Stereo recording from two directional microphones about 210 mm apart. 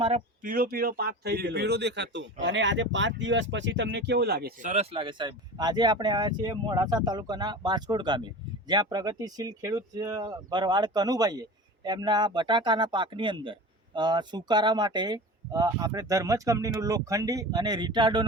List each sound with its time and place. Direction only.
0.0 s speech: 35° right (ahead or behind)
4.7 s speech: 30° right (ahead or behind)